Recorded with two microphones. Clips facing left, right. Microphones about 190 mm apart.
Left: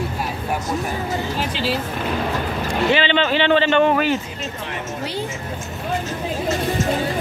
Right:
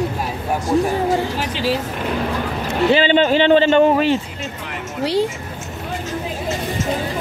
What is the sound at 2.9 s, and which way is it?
A man's voice, 45° right (ahead or behind).